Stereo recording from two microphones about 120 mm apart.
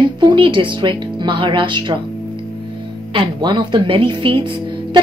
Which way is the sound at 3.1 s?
40° right (ahead or behind).